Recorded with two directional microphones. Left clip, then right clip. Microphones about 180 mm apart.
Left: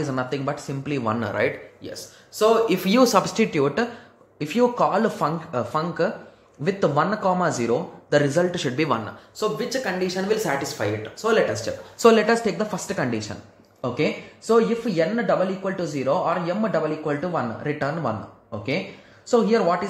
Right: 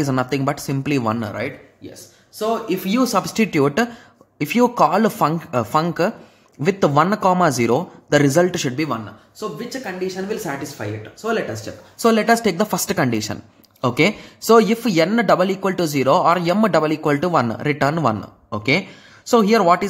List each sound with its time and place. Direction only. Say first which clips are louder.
0.0 s a man's voice: right 5 dB; 35° right (ahead or behind)
1.2 s a man's voice: left 3 dB; 20° right (ahead or behind); by 19.9 s 35° right (ahead or behind)